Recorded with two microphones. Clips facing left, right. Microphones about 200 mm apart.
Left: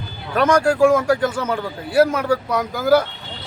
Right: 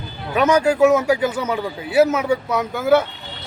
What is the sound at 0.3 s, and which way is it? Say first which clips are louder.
A man's voice: even; 5° right (ahead or behind).